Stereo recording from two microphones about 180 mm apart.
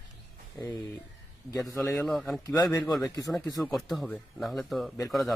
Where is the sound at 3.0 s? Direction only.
20° left (ahead or behind).